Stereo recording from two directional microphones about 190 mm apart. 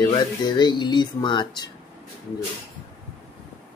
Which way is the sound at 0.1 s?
25° left (ahead or behind).